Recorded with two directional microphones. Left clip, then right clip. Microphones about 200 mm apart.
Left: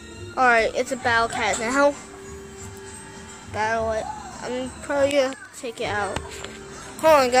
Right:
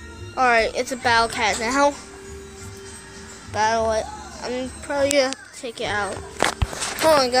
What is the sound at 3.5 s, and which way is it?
Speech, 10° right (ahead or behind).